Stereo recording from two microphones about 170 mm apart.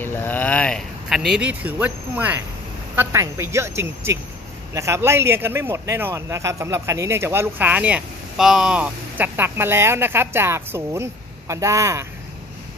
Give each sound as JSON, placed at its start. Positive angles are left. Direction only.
{"t": 0.0, "sound": "a man's voice", "side_deg": 10}